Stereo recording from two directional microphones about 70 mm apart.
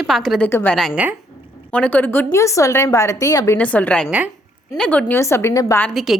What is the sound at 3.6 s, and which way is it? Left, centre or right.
A woman's voice, centre.